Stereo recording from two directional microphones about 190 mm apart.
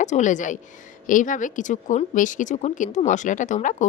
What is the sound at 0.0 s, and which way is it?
Speech, 40° left (ahead or behind).